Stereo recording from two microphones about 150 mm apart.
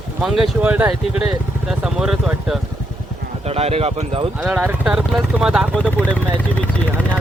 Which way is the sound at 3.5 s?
40° right (ahead or behind).